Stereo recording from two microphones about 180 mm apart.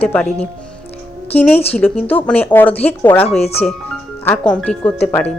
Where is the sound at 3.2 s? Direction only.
35° left (ahead or behind).